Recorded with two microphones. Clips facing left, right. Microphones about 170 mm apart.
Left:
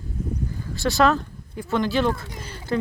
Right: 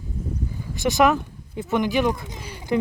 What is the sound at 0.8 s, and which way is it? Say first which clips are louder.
Speech: right 1 dB; 20° right (ahead or behind).